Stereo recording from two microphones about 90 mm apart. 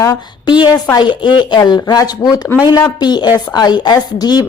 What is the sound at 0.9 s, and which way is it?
A woman's voice, 60° left (ahead or behind).